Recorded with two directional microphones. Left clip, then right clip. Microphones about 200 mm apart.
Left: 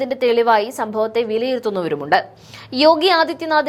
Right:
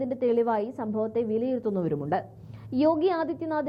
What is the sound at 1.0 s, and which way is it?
A woman's voice, 10° left (ahead or behind).